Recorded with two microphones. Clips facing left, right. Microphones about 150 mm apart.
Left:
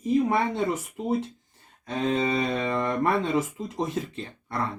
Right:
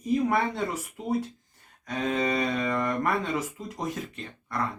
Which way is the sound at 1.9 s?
30° left (ahead or behind).